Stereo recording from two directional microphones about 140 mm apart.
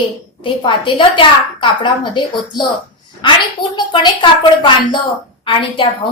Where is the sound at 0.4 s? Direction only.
35° left (ahead or behind).